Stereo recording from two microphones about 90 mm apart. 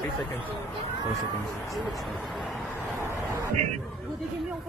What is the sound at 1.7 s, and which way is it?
Speech, centre (ahead or behind).